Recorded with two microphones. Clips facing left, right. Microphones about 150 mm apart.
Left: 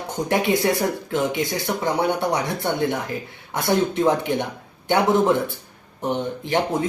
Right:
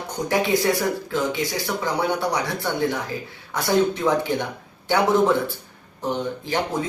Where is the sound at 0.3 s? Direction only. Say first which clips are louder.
Even; 25° left (ahead or behind).